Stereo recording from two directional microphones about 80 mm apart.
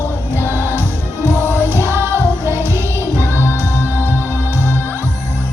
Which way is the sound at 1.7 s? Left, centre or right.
Right.